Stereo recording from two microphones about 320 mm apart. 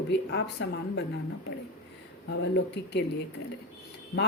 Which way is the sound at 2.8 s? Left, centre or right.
Left.